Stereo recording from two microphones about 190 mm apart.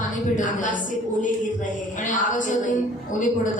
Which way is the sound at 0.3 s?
45° left (ahead or behind).